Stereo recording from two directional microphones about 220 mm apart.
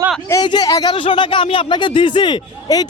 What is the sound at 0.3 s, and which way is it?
A woman's voice, 15° left (ahead or behind).